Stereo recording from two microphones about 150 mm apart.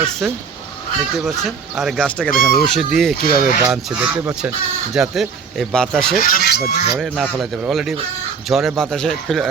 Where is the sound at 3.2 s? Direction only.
75° left (ahead or behind).